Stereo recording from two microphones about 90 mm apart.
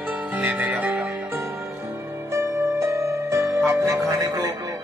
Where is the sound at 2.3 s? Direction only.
30° right (ahead or behind).